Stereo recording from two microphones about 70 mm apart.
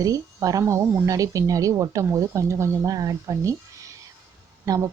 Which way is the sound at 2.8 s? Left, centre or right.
Right.